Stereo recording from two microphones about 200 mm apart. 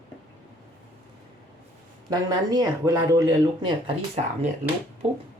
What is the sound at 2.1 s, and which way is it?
Speech, 20° right (ahead or behind).